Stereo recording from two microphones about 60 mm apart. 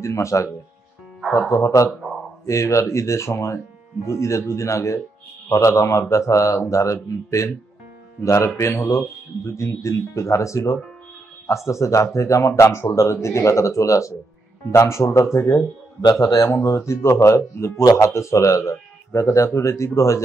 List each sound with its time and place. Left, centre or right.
0.0 s speech: left
1.5 s speech: left
14.7 s speech: left
16.2 s speech: left